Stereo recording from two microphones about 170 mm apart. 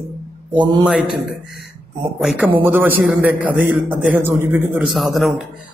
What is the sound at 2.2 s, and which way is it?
A man's voice, 10° right (ahead or behind).